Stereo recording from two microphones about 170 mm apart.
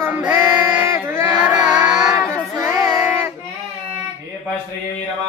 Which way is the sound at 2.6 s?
15° right (ahead or behind).